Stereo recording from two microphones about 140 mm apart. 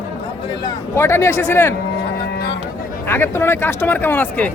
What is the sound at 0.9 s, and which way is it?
Speech, 20° left (ahead or behind).